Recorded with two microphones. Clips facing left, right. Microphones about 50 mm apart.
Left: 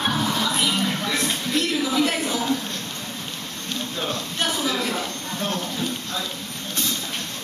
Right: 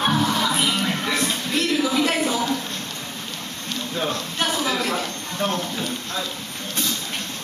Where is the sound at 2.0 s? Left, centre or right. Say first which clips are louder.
Right 2 dB; centre.